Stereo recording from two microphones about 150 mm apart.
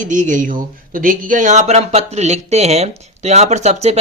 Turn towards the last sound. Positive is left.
turn(degrees=-45)  # may be behind; listen again after turning